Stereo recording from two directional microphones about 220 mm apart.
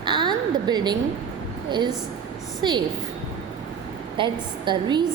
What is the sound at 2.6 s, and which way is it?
Speech, 20° right (ahead or behind).